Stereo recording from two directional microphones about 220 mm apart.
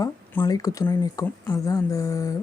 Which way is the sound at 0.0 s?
15° left (ahead or behind).